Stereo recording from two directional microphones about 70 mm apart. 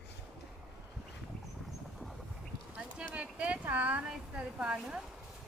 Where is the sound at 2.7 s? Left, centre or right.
Centre.